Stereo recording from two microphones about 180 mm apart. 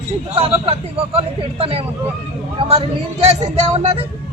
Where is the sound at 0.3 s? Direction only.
35° right (ahead or behind).